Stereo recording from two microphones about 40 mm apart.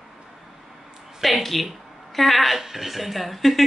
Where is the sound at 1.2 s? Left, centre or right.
Centre.